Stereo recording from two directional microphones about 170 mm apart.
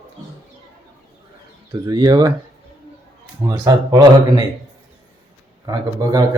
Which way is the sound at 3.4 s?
20° right (ahead or behind).